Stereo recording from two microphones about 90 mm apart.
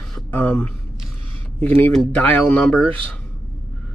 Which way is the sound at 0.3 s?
20° left (ahead or behind).